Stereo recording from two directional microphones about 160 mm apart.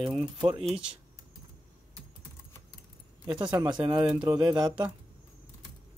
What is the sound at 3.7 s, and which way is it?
Speech, 30° right (ahead or behind).